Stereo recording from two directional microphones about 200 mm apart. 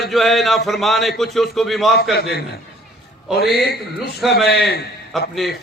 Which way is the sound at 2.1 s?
50° left (ahead or behind).